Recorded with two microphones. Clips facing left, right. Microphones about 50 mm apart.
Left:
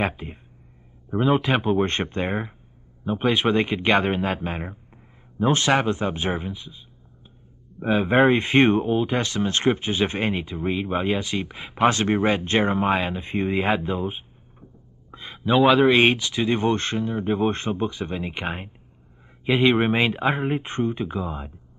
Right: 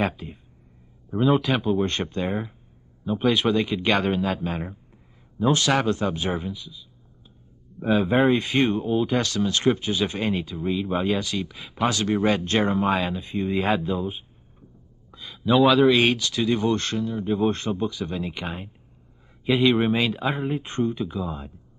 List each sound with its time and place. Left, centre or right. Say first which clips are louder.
0.0 s speech: even; left